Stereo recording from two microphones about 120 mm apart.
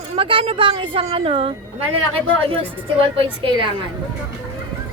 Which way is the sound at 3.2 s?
45° right (ahead or behind).